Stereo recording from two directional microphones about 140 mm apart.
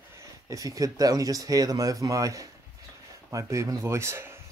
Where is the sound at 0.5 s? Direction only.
25° right (ahead or behind).